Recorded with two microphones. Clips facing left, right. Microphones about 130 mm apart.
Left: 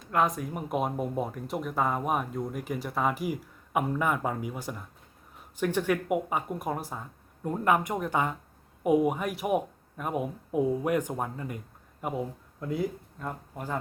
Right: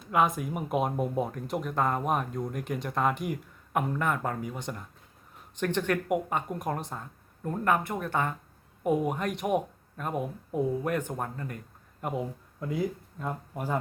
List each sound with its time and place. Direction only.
0.1 s speech: 5° right (ahead or behind); by 11.6 s 10° left (ahead or behind)
12.0 s speech: centre (ahead or behind)